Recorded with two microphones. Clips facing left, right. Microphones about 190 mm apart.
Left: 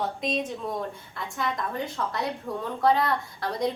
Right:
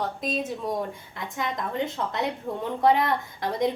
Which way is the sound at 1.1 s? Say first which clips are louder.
Even; 20° right (ahead or behind).